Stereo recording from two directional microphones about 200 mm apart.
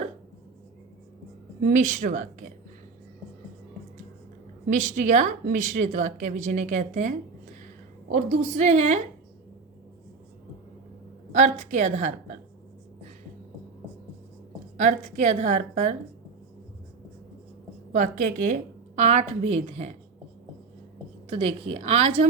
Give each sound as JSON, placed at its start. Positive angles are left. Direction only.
{"t": 1.6, "sound": "a woman's voice", "side_deg": -40}
{"t": 4.7, "sound": "a woman's voice", "side_deg": -40}
{"t": 11.3, "sound": "a woman's voice", "side_deg": -35}
{"t": 14.8, "sound": "a woman's voice", "side_deg": -40}
{"t": 17.9, "sound": "a woman's voice", "side_deg": -40}
{"t": 21.2, "sound": "a woman's voice", "side_deg": -30}